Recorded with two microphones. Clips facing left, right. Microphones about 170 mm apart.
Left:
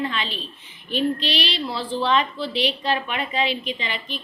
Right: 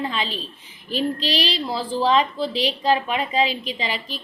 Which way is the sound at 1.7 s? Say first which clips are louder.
Right 3 dB; 40° right (ahead or behind).